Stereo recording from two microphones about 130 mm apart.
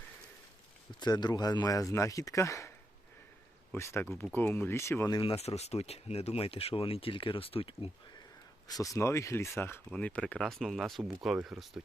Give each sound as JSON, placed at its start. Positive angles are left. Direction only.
{"t": 0.9, "sound": "speech", "side_deg": 30}
{"t": 5.1, "sound": "speech", "side_deg": 45}
{"t": 8.6, "sound": "speech", "side_deg": 25}